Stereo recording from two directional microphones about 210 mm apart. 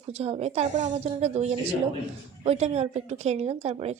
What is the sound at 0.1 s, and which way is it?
A woman's voice, 30° right (ahead or behind).